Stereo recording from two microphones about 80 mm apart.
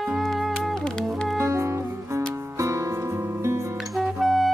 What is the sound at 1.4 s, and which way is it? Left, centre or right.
Music, right.